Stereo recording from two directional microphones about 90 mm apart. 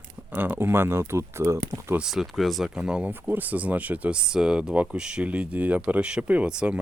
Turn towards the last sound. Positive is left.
turn(degrees=-10)  # may be behind; listen again after turning